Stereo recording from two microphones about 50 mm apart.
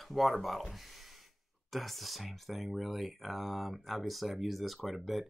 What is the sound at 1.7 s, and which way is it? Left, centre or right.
Speech, centre.